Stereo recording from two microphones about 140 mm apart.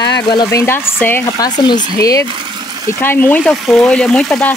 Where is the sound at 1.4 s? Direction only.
30° left (ahead or behind).